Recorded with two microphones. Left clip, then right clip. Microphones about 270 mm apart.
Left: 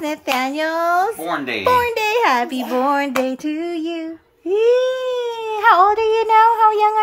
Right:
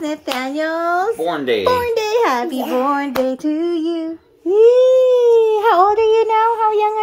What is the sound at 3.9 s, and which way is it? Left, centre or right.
Female singing, left.